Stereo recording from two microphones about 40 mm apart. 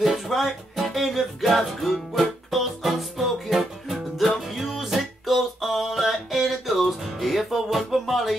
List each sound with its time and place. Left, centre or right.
0.0 s music: centre